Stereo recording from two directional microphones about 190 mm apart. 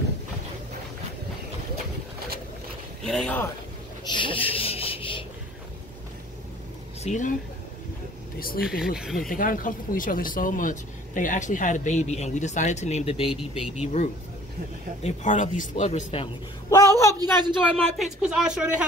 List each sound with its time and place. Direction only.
3.0 s speech: centre (ahead or behind)
4.1 s rub: 25° left (ahead or behind)
7.0 s speech: 40° left (ahead or behind)
8.4 s speech: 50° left (ahead or behind)
8.6 s speech: 5° right (ahead or behind)
9.3 s speech: 45° left (ahead or behind)
16.7 s a sound: 15° left (ahead or behind)
17.7 s speech: centre (ahead or behind)